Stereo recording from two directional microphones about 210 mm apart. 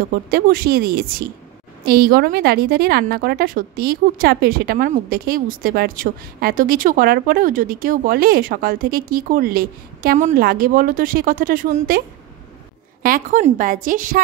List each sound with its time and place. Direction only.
0.1 s a woman's voice: 45° right (ahead or behind)
13.0 s a woman's voice: 40° right (ahead or behind)